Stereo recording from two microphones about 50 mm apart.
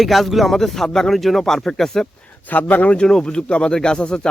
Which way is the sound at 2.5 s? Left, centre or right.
Left.